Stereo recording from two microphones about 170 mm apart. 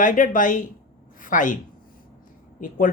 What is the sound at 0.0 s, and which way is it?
A man's voice, 50° left (ahead or behind).